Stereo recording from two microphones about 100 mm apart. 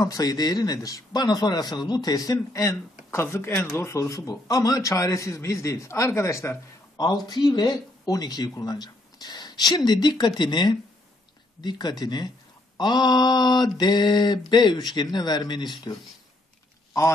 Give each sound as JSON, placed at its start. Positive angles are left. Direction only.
{"t": 0.0, "sound": "a man's voice", "side_deg": 35}
{"t": 7.0, "sound": "speech", "side_deg": 40}